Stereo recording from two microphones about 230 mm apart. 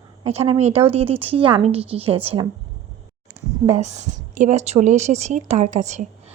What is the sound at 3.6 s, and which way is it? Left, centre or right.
A woman's voice, right.